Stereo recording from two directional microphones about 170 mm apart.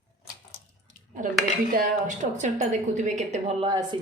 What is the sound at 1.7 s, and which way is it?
A woman's voice, 50° right (ahead or behind).